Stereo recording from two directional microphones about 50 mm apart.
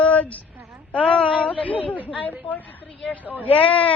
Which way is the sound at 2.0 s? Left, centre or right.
Left.